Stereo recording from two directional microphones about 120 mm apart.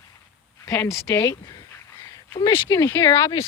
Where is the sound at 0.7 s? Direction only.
20° left (ahead or behind).